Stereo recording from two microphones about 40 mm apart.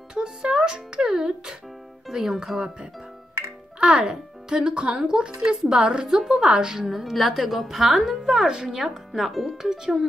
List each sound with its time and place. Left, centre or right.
0.1 s a woman's voice: right
4.0 s a woman's voice: centre
9.6 s speech: centre